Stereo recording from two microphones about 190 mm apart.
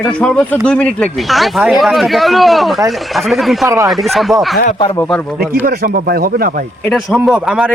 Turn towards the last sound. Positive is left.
turn(degrees=-5)  # may be behind; listen again after turning